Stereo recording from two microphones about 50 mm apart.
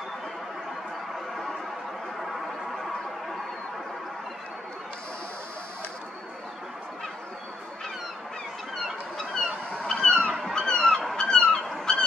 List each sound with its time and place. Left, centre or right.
9.8 s goose: centre
10.5 s honk: centre
11.1 s a sound: centre